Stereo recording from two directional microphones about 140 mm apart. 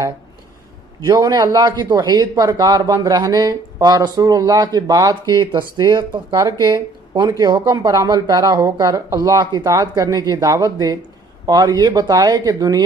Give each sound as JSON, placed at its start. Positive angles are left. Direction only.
{"t": 1.0, "sound": "speech", "side_deg": -30}